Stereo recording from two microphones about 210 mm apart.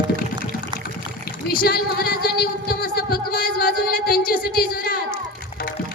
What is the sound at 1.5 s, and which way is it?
Speech, 45° left (ahead or behind).